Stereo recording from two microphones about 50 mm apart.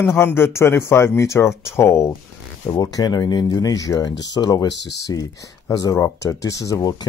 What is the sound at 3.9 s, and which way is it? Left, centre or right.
Speech, left.